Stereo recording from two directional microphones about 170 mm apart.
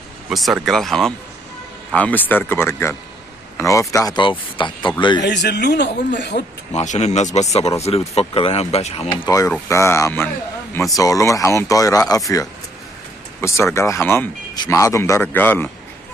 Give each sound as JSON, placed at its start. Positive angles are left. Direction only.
{"t": 0.3, "sound": "speech", "side_deg": 0}
{"t": 5.2, "sound": "speech", "side_deg": 85}
{"t": 6.7, "sound": "speech", "side_deg": 40}
{"t": 9.2, "sound": "speech", "side_deg": 20}